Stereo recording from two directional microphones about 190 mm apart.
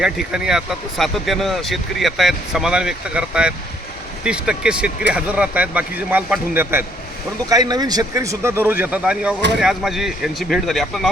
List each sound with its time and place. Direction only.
0.0 s speech: 5° right (ahead or behind)